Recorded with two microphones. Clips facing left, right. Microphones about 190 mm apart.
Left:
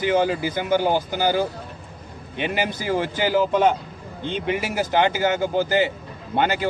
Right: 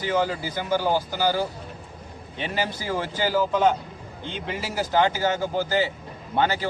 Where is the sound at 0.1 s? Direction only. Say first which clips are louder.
Left 2 dB; 20° left (ahead or behind).